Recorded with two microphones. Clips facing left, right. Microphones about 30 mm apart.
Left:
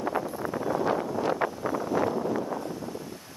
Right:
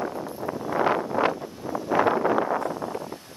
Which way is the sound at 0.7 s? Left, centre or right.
Right.